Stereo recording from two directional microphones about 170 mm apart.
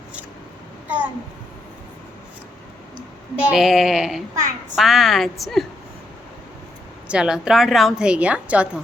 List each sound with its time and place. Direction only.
0.9 s babbling: 10° right (ahead or behind)
3.5 s a woman's voice: centre (ahead or behind)
7.1 s a woman's voice: 5° right (ahead or behind)